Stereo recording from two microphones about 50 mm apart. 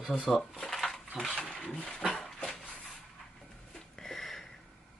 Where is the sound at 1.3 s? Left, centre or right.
Left.